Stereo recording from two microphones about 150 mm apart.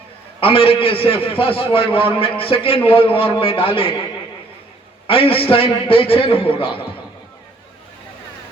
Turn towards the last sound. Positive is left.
turn(degrees=40)  # may be behind; listen again after turning